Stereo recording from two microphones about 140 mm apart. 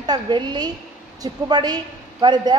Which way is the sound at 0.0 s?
30° right (ahead or behind).